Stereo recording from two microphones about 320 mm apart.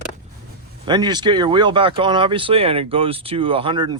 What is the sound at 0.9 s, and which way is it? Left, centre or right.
Speech, centre.